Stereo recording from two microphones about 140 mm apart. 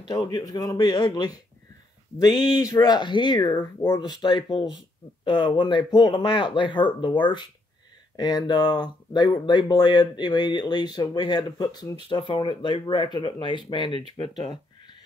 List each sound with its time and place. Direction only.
0.1 s speech: 25° left (ahead or behind)
3.5 s speech: 15° left (ahead or behind)
4.1 s speech: 30° left (ahead or behind)
14.5 s a sound: 30° left (ahead or behind)